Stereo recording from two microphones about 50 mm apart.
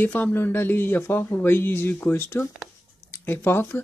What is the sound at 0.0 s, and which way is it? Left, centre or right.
Speech, left.